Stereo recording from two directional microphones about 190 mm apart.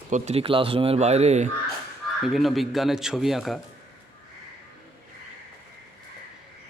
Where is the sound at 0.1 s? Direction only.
35° right (ahead or behind).